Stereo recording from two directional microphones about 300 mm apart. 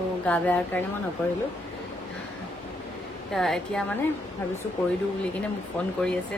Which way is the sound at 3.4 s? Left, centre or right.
Centre.